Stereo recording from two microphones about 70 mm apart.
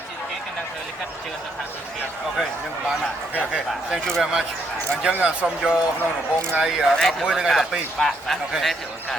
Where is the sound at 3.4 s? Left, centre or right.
Centre.